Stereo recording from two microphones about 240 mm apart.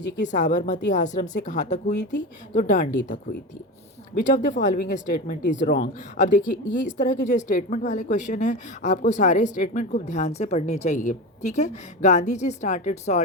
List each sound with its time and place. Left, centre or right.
0.2 s speech: left